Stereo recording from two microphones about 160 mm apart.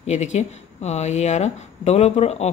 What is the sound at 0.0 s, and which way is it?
A woman's voice, 45° left (ahead or behind).